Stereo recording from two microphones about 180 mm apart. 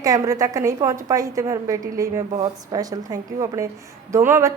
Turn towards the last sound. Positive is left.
turn(degrees=-15)  # may be behind; listen again after turning